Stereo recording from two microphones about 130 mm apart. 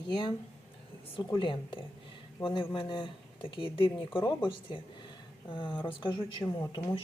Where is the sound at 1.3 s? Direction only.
40° left (ahead or behind).